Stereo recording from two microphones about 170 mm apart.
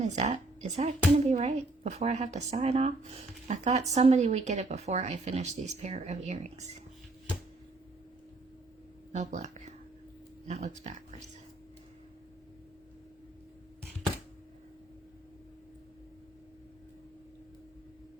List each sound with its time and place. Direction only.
0.0 s speech: 45° right (ahead or behind)
9.1 s speech: 45° right (ahead or behind)